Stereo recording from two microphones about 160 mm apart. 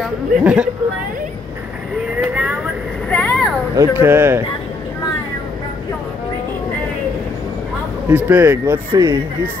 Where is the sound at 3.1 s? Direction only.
5° left (ahead or behind).